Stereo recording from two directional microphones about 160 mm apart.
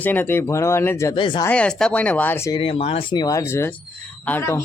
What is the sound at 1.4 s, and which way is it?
Speech, 5° left (ahead or behind).